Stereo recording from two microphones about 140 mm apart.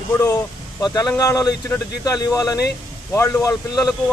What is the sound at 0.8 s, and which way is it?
Speech, 25° left (ahead or behind).